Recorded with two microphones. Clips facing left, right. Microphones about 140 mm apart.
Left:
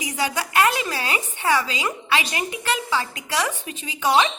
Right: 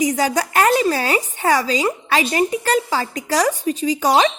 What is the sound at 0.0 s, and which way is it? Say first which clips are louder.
A woman's voice: right 8 dB; 40° right (ahead or behind).